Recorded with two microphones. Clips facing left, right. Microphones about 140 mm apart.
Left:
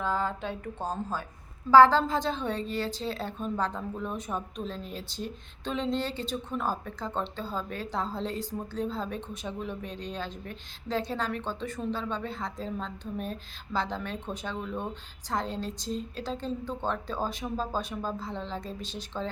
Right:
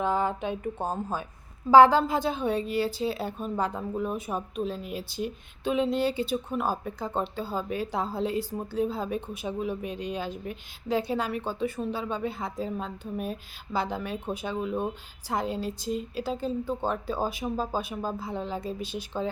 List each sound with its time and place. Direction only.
0.0 s a woman's voice: 15° right (ahead or behind)